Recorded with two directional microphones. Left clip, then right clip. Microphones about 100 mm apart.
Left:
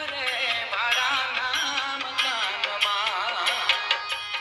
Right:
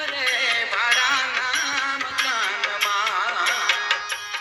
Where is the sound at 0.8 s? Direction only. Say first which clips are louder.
Right 4 dB; 45° right (ahead or behind).